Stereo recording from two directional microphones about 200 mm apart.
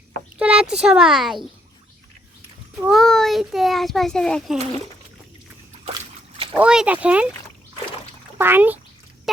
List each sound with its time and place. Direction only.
0.3 s a child's voice: 5° right (ahead or behind)
2.8 s a child's voice: centre (ahead or behind)
5.8 s a sound: 25° right (ahead or behind)
6.5 s speech: 5° right (ahead or behind)
8.4 s speech: 10° right (ahead or behind)